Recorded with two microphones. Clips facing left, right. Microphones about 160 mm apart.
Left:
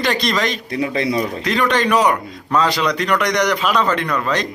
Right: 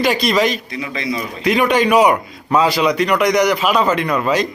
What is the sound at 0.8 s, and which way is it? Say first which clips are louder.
Speech: left 5 dB; 55° left (ahead or behind).